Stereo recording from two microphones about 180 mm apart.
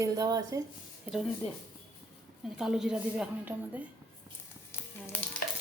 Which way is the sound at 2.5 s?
5° right (ahead or behind).